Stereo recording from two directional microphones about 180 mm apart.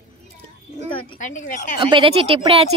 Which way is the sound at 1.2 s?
45° left (ahead or behind).